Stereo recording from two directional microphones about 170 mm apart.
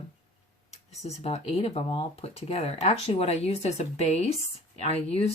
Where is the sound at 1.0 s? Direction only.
40° left (ahead or behind).